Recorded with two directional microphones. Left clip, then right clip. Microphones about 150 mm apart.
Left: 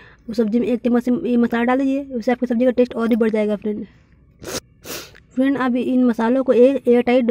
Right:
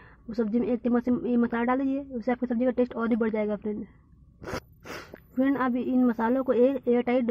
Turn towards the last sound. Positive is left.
turn(degrees=40)  # may be behind; listen again after turning